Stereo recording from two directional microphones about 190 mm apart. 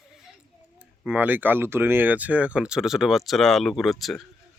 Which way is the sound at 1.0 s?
10° right (ahead or behind).